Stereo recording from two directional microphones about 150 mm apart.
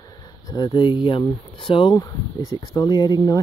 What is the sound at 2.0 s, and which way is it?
Speech, 25° left (ahead or behind).